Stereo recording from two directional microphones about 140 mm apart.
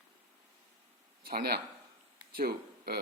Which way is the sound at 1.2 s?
90° right.